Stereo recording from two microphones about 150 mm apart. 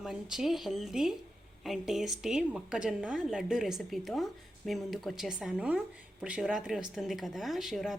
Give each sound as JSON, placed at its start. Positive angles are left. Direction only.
{"t": 0.0, "sound": "a woman's voice", "side_deg": -5}